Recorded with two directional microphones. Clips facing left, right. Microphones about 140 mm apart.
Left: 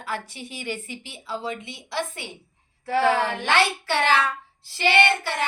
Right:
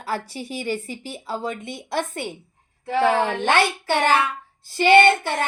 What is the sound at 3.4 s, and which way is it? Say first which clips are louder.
Child singing: right 2 dB; 50° right (ahead or behind).